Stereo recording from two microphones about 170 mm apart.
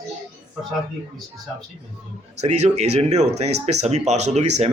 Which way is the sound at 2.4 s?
40° right (ahead or behind).